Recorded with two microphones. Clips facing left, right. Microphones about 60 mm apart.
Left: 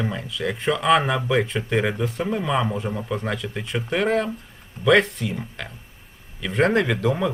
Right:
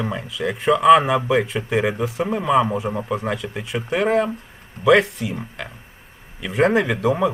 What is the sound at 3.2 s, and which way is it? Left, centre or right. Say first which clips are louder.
Speech: right 2 dB; centre.